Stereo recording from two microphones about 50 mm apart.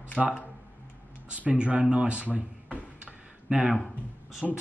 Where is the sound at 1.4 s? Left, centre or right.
Right.